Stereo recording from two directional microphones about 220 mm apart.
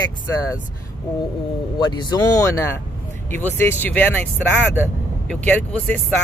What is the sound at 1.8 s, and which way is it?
Speech, 20° left (ahead or behind).